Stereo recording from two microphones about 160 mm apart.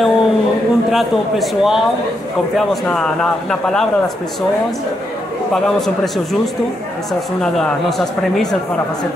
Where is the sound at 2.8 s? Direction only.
5° left (ahead or behind).